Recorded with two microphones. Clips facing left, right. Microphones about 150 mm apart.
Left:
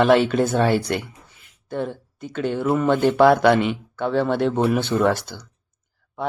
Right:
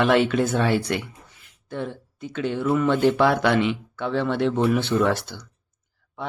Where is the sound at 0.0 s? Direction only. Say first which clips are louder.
Left 3 dB; 40° left (ahead or behind).